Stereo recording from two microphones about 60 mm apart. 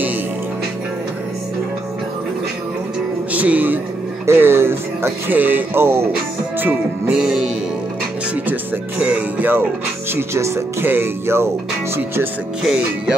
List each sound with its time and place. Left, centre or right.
3.3 s speech: right
4.3 s speech: right
7.1 s music: centre
8.5 s speech: right
10.1 s speech: right
12.6 s music: centre